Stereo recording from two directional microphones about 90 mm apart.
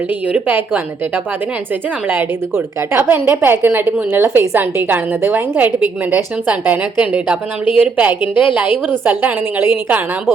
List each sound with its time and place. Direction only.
0.3 s a woman's voice: 20° right (ahead or behind)
2.9 s a woman's voice: 20° right (ahead or behind)